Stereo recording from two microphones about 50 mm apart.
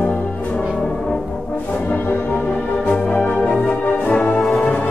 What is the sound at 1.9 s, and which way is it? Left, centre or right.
Music, left.